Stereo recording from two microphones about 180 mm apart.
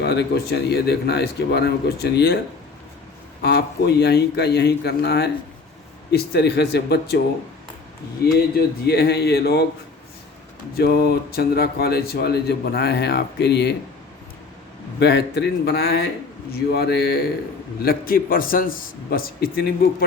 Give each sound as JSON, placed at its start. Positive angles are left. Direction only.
{"t": 0.0, "sound": "speech", "side_deg": 70}
{"t": 3.4, "sound": "speech", "side_deg": 65}
{"t": 8.2, "sound": "speech", "side_deg": 60}
{"t": 10.8, "sound": "speech", "side_deg": 60}
{"t": 14.9, "sound": "speech", "side_deg": 70}
{"t": 17.8, "sound": "a man's voice", "side_deg": 55}